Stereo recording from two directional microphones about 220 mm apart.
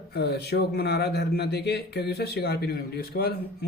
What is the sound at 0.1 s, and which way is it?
A man's voice, 50° left (ahead or behind).